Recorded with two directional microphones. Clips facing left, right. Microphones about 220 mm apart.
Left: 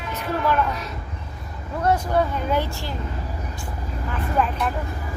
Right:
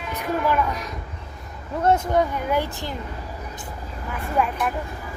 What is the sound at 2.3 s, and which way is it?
Speech, 15° right (ahead or behind).